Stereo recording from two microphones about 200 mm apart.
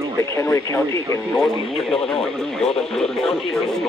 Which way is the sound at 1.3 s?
Centre (ahead or behind).